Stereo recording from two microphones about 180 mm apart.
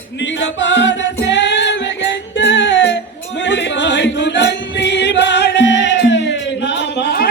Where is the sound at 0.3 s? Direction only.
85° left.